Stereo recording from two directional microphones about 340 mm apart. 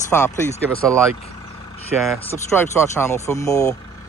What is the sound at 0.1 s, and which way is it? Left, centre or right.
Speech, centre.